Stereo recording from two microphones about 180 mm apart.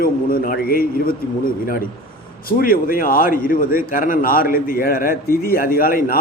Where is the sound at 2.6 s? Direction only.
55° left (ahead or behind).